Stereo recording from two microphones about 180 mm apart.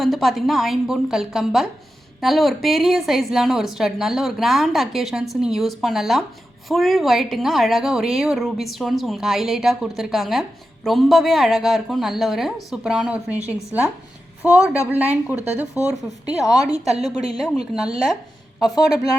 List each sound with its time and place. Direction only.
0.0 s a woman's voice: centre (ahead or behind)
18.6 s speech: 20° left (ahead or behind)